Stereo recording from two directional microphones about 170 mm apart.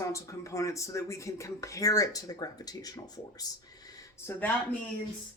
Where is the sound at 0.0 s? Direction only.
20° left (ahead or behind).